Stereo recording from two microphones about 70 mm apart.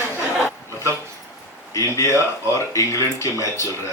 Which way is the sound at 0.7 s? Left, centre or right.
Right.